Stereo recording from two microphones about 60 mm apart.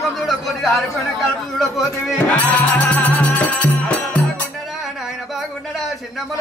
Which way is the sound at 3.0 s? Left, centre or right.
Left.